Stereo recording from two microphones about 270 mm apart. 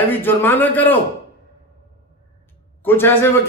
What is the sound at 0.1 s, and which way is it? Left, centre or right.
Speech, centre.